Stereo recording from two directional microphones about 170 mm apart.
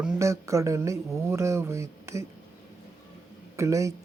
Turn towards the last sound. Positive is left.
turn(degrees=-20)  # may be behind; listen again after turning